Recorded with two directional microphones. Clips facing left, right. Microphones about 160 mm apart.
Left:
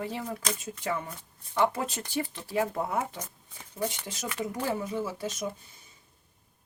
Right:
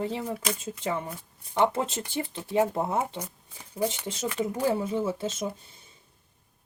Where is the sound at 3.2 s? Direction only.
10° right (ahead or behind).